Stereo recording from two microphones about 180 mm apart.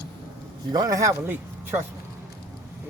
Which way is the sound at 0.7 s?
20° right (ahead or behind).